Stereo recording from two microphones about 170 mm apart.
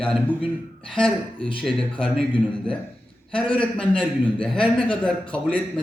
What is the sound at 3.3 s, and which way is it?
A man's voice, 5° left (ahead or behind).